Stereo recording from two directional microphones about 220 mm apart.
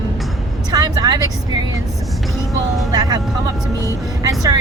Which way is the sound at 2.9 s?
15° right (ahead or behind).